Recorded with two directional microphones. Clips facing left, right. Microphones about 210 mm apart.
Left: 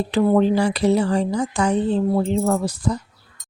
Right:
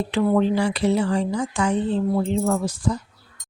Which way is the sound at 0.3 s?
40° left (ahead or behind).